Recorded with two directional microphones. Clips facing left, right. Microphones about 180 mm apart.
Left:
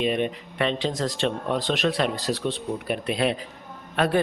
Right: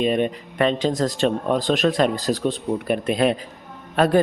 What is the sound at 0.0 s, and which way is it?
A man's voice, 40° right (ahead or behind).